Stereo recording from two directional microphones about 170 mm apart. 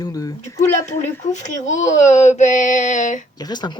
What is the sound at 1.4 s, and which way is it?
Speech, 45° left (ahead or behind).